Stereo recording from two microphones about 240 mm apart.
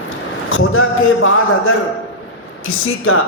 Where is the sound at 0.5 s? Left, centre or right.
Left.